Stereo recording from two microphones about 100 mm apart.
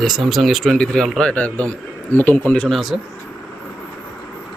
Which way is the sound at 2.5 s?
5° left (ahead or behind).